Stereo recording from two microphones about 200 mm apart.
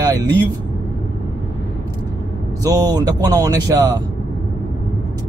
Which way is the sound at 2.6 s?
20° right (ahead or behind).